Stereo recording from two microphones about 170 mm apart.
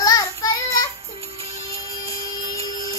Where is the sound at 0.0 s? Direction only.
20° left (ahead or behind).